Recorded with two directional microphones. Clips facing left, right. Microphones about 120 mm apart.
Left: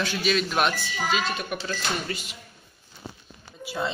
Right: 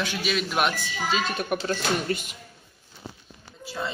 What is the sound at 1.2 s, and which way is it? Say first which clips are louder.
A child's voice: right 2 dB; 50° right (ahead or behind).